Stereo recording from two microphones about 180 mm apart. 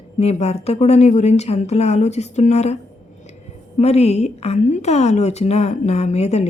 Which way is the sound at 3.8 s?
35° left (ahead or behind).